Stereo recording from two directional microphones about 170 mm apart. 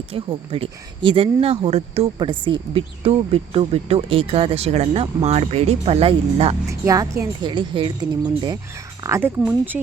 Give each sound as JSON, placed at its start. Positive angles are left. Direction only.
{"t": 0.1, "sound": "speech", "side_deg": -35}
{"t": 6.7, "sound": "a woman's voice", "side_deg": -20}
{"t": 9.0, "sound": "speech", "side_deg": -15}